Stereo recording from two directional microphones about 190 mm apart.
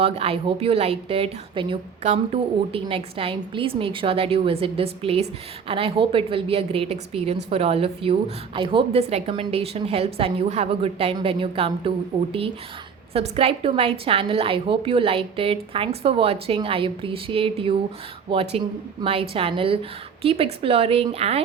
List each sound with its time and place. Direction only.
0.0 s a woman's voice: 30° right (ahead or behind)